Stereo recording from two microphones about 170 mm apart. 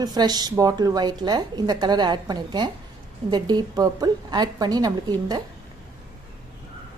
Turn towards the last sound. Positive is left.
turn(degrees=-25)  # may be behind; listen again after turning